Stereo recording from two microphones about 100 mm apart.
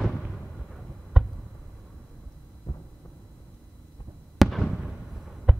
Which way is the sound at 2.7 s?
45° left (ahead or behind).